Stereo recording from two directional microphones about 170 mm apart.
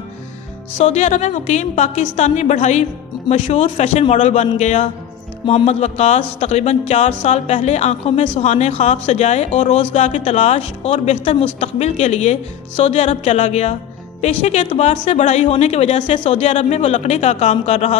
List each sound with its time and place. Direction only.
0.7 s a woman's voice: 45° left (ahead or behind)